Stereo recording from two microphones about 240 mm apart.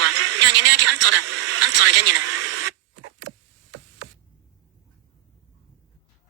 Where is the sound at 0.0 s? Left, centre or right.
Right.